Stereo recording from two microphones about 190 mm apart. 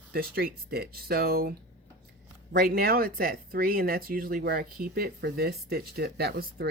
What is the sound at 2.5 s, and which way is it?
Speech, 55° right (ahead or behind).